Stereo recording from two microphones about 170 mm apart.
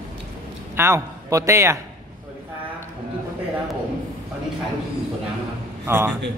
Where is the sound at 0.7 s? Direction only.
15° right (ahead or behind).